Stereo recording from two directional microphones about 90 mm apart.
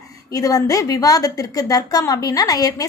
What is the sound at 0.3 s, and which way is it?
A woman's voice, 40° left (ahead or behind).